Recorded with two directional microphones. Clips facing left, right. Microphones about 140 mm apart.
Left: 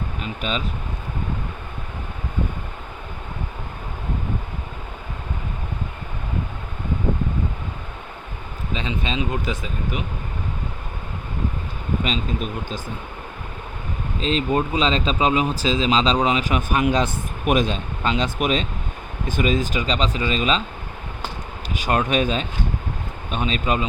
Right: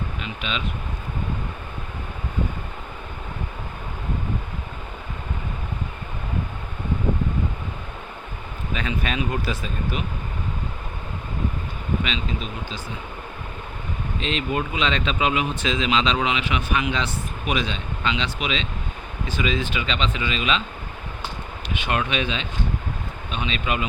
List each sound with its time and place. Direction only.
0.2 s speech: 40° left (ahead or behind)
8.7 s speech: 25° left (ahead or behind)
12.0 s speech: 45° left (ahead or behind)
14.2 s speech: 35° left (ahead or behind)
21.7 s speech: 40° left (ahead or behind)